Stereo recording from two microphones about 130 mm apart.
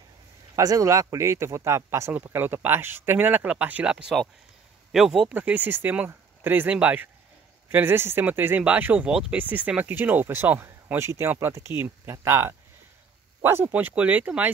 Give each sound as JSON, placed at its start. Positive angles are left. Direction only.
{"t": 0.6, "sound": "speech", "side_deg": -25}